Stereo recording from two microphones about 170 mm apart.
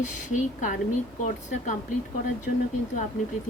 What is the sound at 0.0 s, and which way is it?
Speech, 45° left (ahead or behind).